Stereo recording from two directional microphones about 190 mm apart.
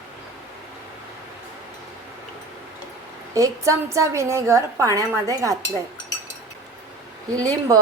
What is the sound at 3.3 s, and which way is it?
A woman's voice, 15° right (ahead or behind).